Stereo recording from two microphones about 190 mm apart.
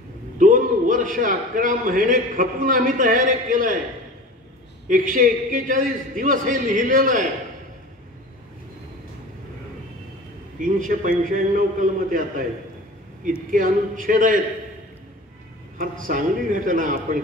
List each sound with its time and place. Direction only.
0.4 s a man's voice: 45° right (ahead or behind)
4.8 s a man's voice: 45° right (ahead or behind)
10.6 s a man's voice: 45° right (ahead or behind)
13.5 s a man's voice: 45° right (ahead or behind)
15.8 s a man's voice: 45° right (ahead or behind)